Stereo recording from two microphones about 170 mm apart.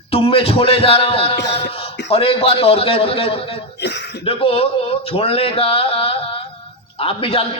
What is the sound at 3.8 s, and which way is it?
Speech, 85° left.